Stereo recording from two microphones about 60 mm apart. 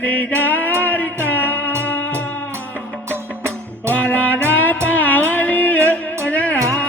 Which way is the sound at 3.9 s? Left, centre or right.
Left.